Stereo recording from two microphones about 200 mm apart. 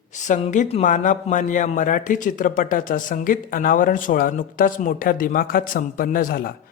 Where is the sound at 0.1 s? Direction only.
35° left (ahead or behind).